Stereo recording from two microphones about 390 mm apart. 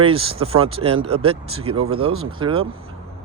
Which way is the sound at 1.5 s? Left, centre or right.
Right.